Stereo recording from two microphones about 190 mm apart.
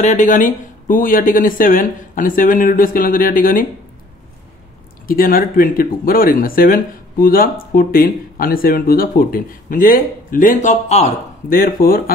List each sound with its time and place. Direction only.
0.0 s speech: 40° left (ahead or behind)
5.0 s speech: 50° left (ahead or behind)